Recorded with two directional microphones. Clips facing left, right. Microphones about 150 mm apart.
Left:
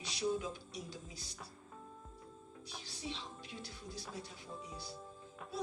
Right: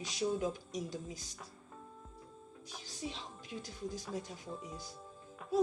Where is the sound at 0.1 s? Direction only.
45° right (ahead or behind).